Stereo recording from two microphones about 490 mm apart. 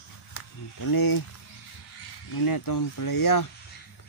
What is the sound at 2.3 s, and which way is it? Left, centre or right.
Speech, left.